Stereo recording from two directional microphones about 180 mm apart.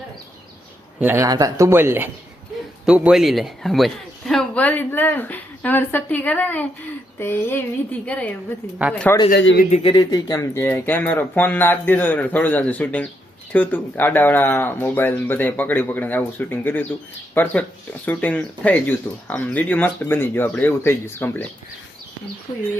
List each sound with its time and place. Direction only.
0.9 s speech: 15° right (ahead or behind); by 8.4 s 10° left (ahead or behind)
9.3 s speech: 90° left
9.7 s speech: 25° left (ahead or behind)